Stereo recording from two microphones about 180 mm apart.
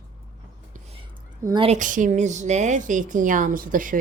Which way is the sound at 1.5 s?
40° right (ahead or behind).